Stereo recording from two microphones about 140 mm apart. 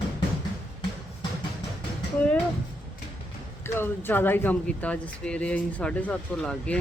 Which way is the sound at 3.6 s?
15° left (ahead or behind).